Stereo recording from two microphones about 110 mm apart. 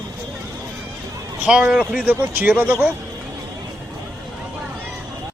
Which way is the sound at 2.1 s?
20° right (ahead or behind).